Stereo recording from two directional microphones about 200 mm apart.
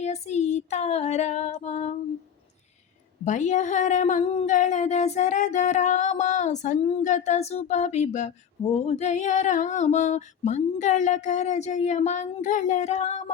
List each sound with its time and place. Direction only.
0.0 s speech: 35° left (ahead or behind)
3.2 s speech: 35° left (ahead or behind)